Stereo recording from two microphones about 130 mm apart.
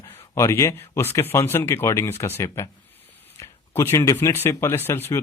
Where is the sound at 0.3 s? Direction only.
20° left (ahead or behind).